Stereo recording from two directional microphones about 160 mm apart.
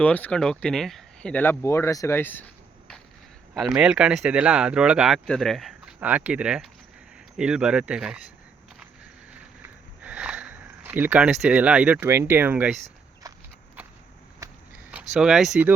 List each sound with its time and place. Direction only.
0.0 s speech: 10° left (ahead or behind)
3.5 s speech: 5° right (ahead or behind)
10.0 s speech: 10° right (ahead or behind)
13.2 s walk: 20° right (ahead or behind)
14.8 s speech: 5° right (ahead or behind)